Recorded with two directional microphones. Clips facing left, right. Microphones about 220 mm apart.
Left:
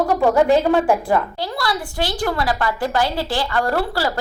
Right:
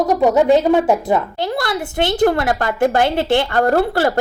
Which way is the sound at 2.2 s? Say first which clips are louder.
Right 6 dB; 50° right (ahead or behind).